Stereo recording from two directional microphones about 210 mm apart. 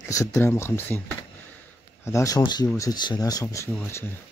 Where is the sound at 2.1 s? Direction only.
15° left (ahead or behind).